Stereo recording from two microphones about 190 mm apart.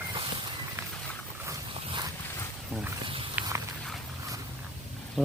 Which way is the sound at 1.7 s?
25° right (ahead or behind).